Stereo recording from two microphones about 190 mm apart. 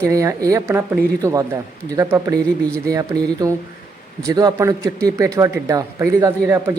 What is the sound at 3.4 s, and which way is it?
A man's voice, 20° right (ahead or behind).